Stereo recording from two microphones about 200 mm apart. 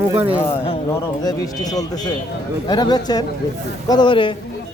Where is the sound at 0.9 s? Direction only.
20° left (ahead or behind).